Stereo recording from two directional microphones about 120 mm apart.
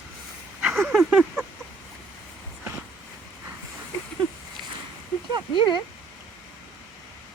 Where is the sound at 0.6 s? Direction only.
5° right (ahead or behind).